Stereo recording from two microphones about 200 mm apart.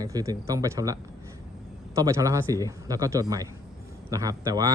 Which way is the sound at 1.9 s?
15° right (ahead or behind).